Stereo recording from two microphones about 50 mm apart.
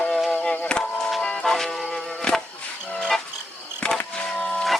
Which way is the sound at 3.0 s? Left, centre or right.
Centre.